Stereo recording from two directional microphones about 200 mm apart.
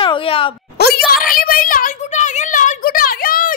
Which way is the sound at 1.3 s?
45° left (ahead or behind).